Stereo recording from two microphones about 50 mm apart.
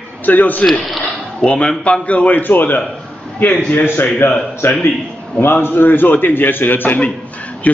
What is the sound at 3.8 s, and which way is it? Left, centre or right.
Speech, left.